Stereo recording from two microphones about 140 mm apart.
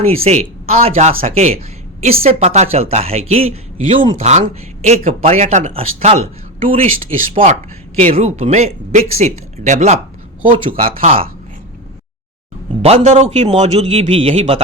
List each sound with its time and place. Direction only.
0.0 s a man's voice: 50° right (ahead or behind)
8.0 s a man's voice: 55° right (ahead or behind)
10.4 s speech: 40° right (ahead or behind)
10.8 s speech: 75° right (ahead or behind)
12.8 s a man's voice: 45° right (ahead or behind)